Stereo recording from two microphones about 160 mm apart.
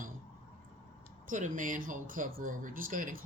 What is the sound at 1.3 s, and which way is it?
Speech, 55° right (ahead or behind).